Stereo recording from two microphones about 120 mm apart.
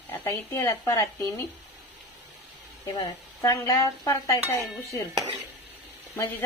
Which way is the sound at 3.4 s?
25° left (ahead or behind).